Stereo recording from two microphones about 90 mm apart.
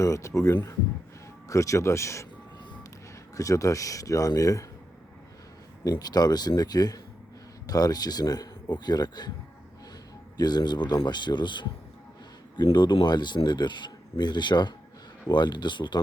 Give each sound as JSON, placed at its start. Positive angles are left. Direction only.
{"t": 0.0, "sound": "speech", "side_deg": 35}
{"t": 3.3, "sound": "speech", "side_deg": 40}
{"t": 5.8, "sound": "speech", "side_deg": 45}
{"t": 10.3, "sound": "speech", "side_deg": 50}